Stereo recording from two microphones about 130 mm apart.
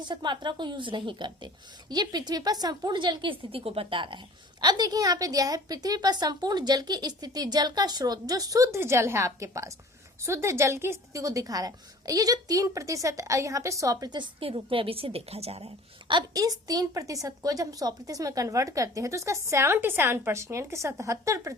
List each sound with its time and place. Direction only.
0.0 s a woman's voice: 35° right (ahead or behind); by 16.1 s 50° right (ahead or behind)
16.1 s a woman's voice: 30° right (ahead or behind)